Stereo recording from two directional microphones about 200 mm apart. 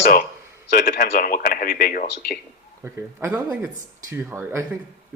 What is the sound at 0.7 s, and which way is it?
Speech, 45° left (ahead or behind).